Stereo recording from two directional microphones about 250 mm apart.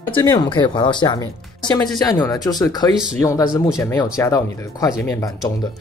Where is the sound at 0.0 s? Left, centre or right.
Centre.